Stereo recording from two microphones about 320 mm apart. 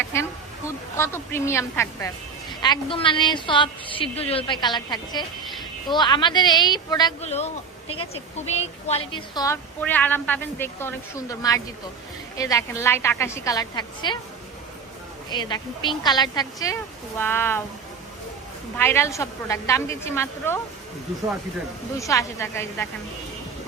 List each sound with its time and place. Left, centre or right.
0.1 s a woman's voice: centre
15.3 s a woman's voice: centre
18.8 s a woman's voice: centre
21.9 s a woman's voice: centre